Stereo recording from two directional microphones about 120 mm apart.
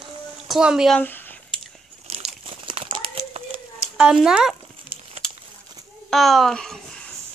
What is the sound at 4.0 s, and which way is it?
Speech, 5° right (ahead or behind).